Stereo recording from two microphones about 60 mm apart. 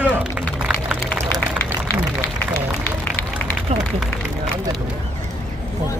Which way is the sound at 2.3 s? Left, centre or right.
Left.